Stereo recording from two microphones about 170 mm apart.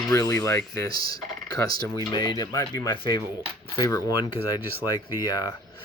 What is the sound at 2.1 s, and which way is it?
Speech, 25° left (ahead or behind).